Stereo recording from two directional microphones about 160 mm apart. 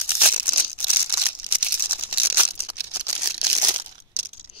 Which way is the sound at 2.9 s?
25° right (ahead or behind).